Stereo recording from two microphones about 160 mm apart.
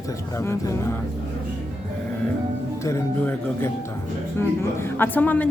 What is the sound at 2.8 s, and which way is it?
Speech, 15° left (ahead or behind).